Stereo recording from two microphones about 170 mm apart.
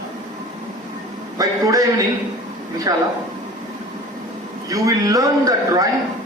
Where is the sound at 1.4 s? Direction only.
20° right (ahead or behind).